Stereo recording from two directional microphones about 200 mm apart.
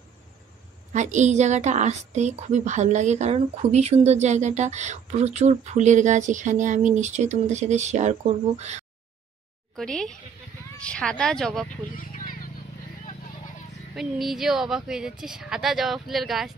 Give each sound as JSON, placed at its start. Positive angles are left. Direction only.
{"t": 0.9, "sound": "a woman's voice", "side_deg": -35}
{"t": 9.8, "sound": "speech", "side_deg": 5}
{"t": 11.9, "sound": "a sound", "side_deg": 45}
{"t": 13.9, "sound": "speech", "side_deg": 0}